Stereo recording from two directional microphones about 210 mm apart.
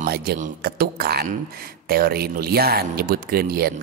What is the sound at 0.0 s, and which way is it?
A man's voice, 45° right (ahead or behind).